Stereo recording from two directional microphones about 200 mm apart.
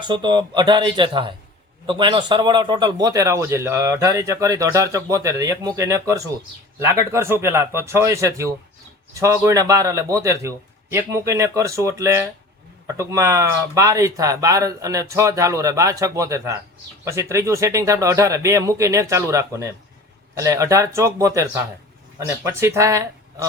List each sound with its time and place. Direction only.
0.1 s a man's voice: 20° right (ahead or behind)